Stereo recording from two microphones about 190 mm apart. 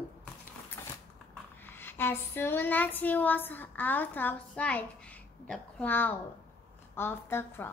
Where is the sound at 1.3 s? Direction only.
10° left (ahead or behind).